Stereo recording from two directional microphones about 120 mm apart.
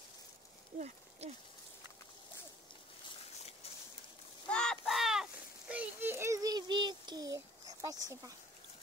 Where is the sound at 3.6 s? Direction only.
55° left (ahead or behind).